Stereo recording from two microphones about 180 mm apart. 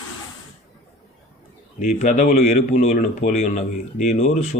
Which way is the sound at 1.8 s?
45° left (ahead or behind).